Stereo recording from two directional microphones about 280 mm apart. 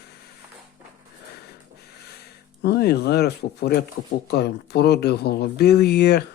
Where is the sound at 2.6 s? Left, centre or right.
Left.